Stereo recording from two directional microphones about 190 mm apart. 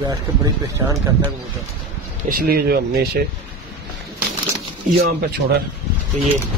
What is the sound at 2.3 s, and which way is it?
Speech, 55° right (ahead or behind).